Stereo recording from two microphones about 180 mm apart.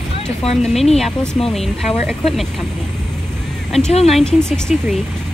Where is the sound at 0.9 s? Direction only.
5° left (ahead or behind).